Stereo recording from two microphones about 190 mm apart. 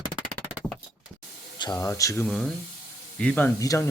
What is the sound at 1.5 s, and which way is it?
Speech, 20° left (ahead or behind).